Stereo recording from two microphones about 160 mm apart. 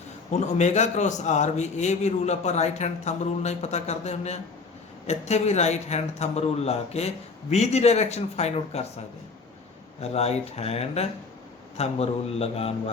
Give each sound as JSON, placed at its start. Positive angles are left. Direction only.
{"t": 0.3, "sound": "a man's voice", "side_deg": 45}
{"t": 10.0, "sound": "speech", "side_deg": 40}